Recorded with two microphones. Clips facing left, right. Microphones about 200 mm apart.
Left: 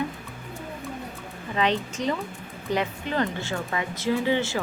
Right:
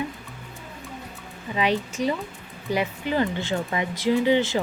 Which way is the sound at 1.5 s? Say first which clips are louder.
Right 1 dB; 10° right (ahead or behind).